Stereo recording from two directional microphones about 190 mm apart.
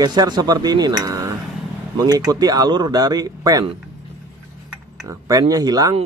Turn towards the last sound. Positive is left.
turn(degrees=-20)  # may be behind; listen again after turning